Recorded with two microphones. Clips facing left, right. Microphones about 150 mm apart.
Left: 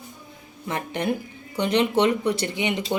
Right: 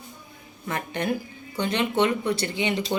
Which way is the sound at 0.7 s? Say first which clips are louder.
Left 1 dB; 25° left (ahead or behind).